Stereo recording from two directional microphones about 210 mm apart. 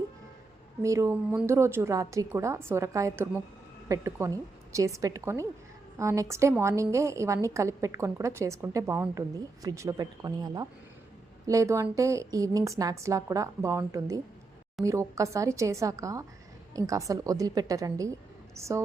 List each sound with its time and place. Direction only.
0.8 s a woman's voice: 15° right (ahead or behind)